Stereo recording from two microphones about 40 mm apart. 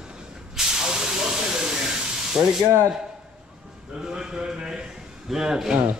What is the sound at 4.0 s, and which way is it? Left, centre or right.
A man's voice, centre.